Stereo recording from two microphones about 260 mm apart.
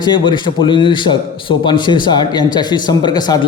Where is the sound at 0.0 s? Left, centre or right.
Centre.